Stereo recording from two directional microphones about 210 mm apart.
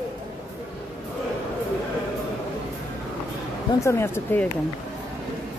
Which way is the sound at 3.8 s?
10° left (ahead or behind).